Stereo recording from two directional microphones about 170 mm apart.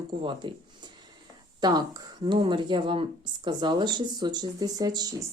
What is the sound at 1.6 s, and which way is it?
Speech, 25° right (ahead or behind).